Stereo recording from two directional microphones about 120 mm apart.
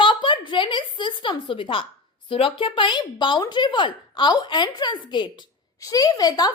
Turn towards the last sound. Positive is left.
turn(degrees=30)  # may be behind; listen again after turning